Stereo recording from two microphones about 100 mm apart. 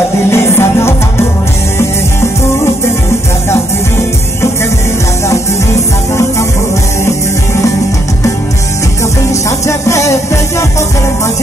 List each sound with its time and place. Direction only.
0.3 s music: 25° left (ahead or behind)
9.3 s music: 30° left (ahead or behind)